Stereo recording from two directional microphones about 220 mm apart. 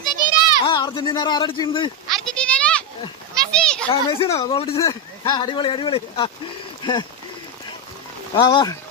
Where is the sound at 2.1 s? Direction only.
5° left (ahead or behind).